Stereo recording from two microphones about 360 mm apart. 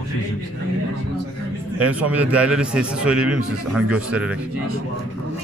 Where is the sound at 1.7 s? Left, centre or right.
Centre.